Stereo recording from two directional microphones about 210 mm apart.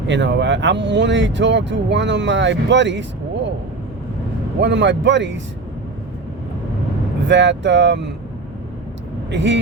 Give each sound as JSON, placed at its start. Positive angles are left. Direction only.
{"t": 0.1, "sound": "speech", "side_deg": -60}
{"t": 4.6, "sound": "speech", "side_deg": -60}
{"t": 7.3, "sound": "speech", "side_deg": -55}
{"t": 9.3, "sound": "speech", "side_deg": -55}